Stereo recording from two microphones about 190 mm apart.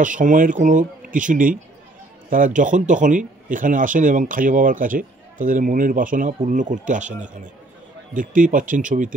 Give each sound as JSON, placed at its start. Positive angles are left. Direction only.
{"t": 0.0, "sound": "speech", "side_deg": -40}